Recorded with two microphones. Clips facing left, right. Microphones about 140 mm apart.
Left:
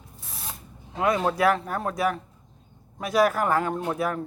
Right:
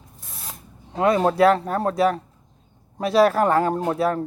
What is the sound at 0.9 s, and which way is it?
A man's voice, 30° right (ahead or behind).